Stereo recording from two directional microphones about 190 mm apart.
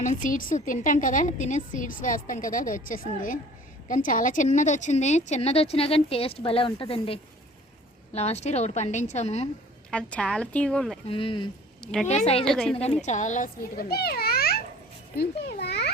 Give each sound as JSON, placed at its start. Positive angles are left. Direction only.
{"t": 0.0, "sound": "a woman's voice", "side_deg": 45}
{"t": 9.9, "sound": "a woman's voice", "side_deg": 5}
{"t": 11.1, "sound": "speech", "side_deg": 25}
{"t": 11.8, "sound": "a woman's voice", "side_deg": 5}
{"t": 12.0, "sound": "a woman's voice", "side_deg": 35}
{"t": 12.5, "sound": "a woman's voice", "side_deg": 0}
{"t": 12.7, "sound": "a child's voice", "side_deg": 35}
{"t": 15.2, "sound": "a sound", "side_deg": 55}